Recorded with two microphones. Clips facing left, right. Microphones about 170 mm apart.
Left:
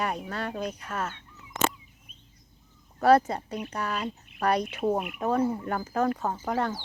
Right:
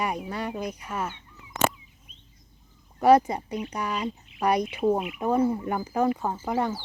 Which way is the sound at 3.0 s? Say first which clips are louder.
Right 2 dB; 15° right (ahead or behind).